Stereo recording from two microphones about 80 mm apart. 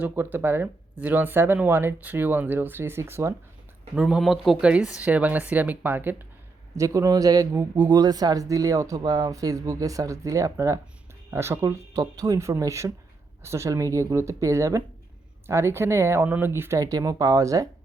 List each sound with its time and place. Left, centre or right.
0.0 s speech: right
3.9 s speech: centre
4.5 s speech: centre
6.7 s speech: right
16.8 s speech: right